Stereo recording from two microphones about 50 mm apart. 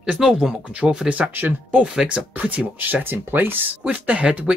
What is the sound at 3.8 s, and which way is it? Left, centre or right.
Speech, right.